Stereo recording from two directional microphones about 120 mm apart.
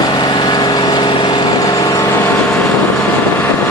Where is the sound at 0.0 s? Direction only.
35° left (ahead or behind).